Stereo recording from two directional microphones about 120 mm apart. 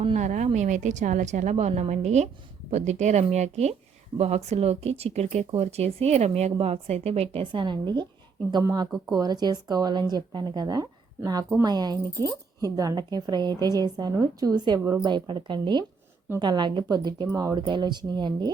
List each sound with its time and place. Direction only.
0.0 s a woman's voice: 70° right (ahead or behind); by 18.5 s 40° right (ahead or behind)